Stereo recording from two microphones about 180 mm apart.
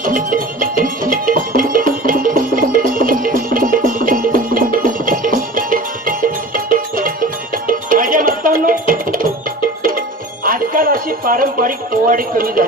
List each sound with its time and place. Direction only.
0.0 s music: 50° right (ahead or behind)
10.4 s music: 55° right (ahead or behind)